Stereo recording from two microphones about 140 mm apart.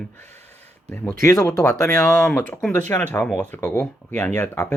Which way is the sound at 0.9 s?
15° left (ahead or behind).